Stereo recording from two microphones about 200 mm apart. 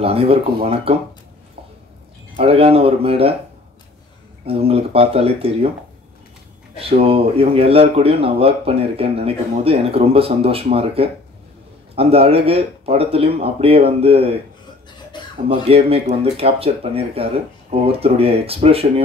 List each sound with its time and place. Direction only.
0.0 s speech: 30° right (ahead or behind)
2.3 s speech: 30° right (ahead or behind)
4.5 s speech: 30° right (ahead or behind)
6.8 s speech: 30° right (ahead or behind)
15.4 s speech: 30° right (ahead or behind)